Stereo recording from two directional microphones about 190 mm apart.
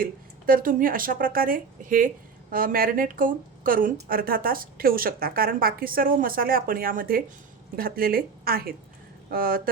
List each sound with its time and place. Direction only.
0.0 s a woman's voice: 50° right (ahead or behind)